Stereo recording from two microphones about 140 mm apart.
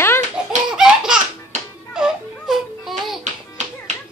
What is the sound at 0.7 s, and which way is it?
Laughter, 5° right (ahead or behind).